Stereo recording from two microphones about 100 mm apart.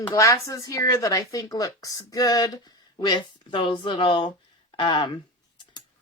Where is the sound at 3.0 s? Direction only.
50° left (ahead or behind).